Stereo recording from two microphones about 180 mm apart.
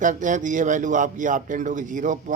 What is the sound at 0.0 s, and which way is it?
Speech, 45° right (ahead or behind).